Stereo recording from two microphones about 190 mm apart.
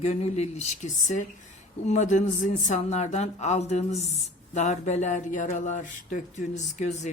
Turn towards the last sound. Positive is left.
turn(degrees=40)  # may be behind; listen again after turning